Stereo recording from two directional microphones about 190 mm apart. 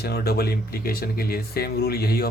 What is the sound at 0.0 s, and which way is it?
Speech, 55° left (ahead or behind).